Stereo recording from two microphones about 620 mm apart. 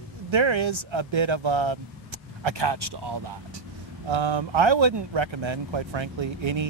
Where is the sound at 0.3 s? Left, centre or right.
Right.